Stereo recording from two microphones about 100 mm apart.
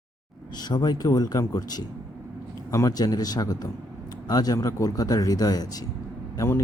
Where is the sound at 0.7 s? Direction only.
40° left (ahead or behind).